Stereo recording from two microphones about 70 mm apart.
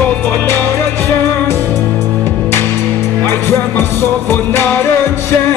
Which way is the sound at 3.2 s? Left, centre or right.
Left.